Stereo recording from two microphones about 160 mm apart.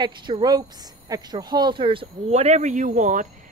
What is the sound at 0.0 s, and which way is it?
Speech, 30° right (ahead or behind).